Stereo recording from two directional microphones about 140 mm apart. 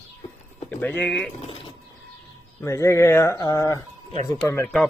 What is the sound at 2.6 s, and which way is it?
Speech, 20° left (ahead or behind).